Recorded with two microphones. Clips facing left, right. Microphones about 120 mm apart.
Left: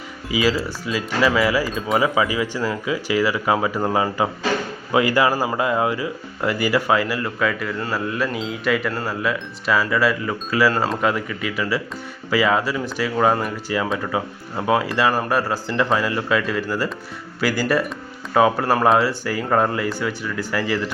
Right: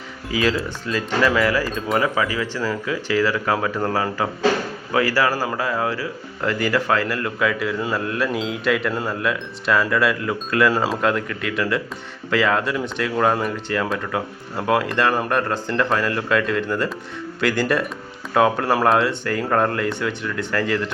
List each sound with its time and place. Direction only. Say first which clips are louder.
0.3 s speech: left 1 dB; 5° left (ahead or behind)